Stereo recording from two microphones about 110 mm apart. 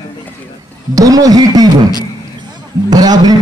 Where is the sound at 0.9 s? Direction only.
35° right (ahead or behind).